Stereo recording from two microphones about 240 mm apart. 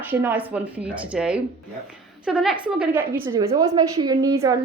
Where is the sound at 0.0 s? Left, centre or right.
Centre.